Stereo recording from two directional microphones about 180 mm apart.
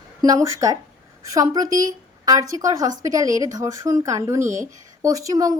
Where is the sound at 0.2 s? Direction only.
20° right (ahead or behind).